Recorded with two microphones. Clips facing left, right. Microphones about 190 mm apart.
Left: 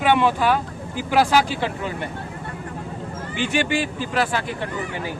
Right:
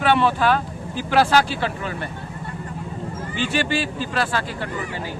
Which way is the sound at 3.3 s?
15° left (ahead or behind).